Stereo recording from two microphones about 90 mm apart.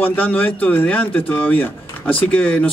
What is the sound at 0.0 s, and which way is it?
Speech, 20° left (ahead or behind).